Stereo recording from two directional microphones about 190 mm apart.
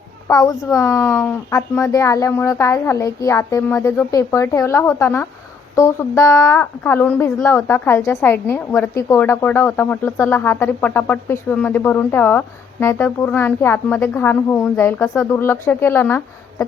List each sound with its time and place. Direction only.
0.3 s a woman's voice: 20° left (ahead or behind)